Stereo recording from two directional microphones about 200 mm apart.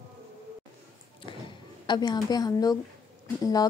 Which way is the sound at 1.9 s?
20° left (ahead or behind).